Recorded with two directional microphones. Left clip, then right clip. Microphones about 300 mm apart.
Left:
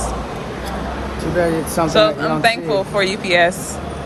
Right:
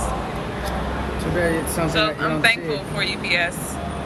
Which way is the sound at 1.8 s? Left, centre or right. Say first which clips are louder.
Left 8 dB; centre.